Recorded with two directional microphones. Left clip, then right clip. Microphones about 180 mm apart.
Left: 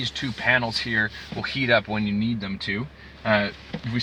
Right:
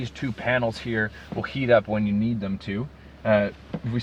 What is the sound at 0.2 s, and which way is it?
Speech, 25° right (ahead or behind).